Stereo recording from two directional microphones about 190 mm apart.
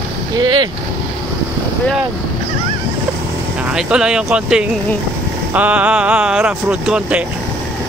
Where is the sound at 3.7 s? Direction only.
5° right (ahead or behind).